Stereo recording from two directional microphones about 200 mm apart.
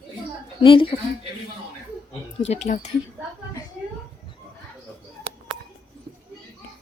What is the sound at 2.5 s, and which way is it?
Speech, 35° left (ahead or behind).